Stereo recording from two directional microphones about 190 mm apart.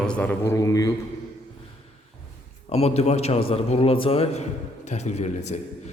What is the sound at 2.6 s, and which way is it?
A man's voice, 35° left (ahead or behind).